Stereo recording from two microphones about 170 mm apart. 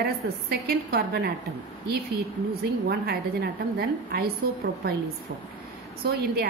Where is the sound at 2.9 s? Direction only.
65° right (ahead or behind).